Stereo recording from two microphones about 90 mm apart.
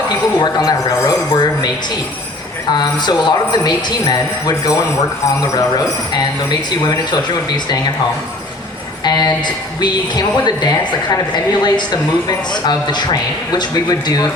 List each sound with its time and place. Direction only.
0.3 s a man's voice: 50° left (ahead or behind)
2.7 s a man's voice: 50° left (ahead or behind)
9.0 s a man's voice: 50° left (ahead or behind)